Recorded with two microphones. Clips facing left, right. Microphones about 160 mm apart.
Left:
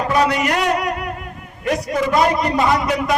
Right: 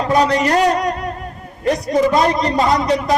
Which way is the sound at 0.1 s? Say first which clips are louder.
Right 4 dB; 35° right (ahead or behind).